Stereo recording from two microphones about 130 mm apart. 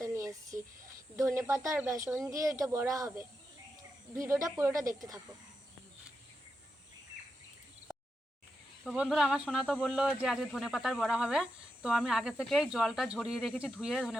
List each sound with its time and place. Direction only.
0.0 s a sound: 25° right (ahead or behind)
1.1 s speech: 20° right (ahead or behind)
8.8 s speech: centre (ahead or behind)
9.6 s speech: 10° left (ahead or behind)